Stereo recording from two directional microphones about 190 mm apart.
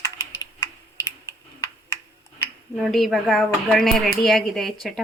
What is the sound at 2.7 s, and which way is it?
Speech, centre (ahead or behind).